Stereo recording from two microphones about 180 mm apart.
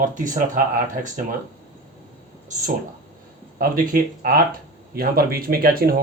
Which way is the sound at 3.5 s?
50° right (ahead or behind).